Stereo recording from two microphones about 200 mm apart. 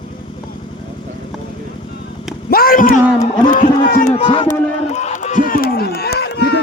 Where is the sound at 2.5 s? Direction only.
45° left (ahead or behind).